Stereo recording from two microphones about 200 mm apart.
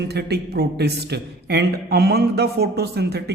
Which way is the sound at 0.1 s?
55° right (ahead or behind).